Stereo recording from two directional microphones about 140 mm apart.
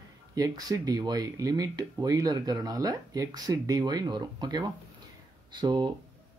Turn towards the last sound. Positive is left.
turn(degrees=-30)  # may be behind; listen again after turning